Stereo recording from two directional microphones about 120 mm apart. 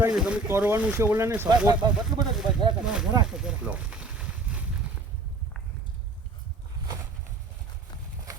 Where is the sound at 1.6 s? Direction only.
40° right (ahead or behind).